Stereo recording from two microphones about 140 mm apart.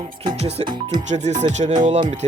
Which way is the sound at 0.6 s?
45° right (ahead or behind).